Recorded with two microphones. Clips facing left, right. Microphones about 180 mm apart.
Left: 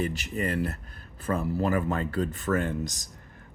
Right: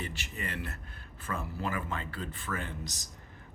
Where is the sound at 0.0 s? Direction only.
40° left (ahead or behind).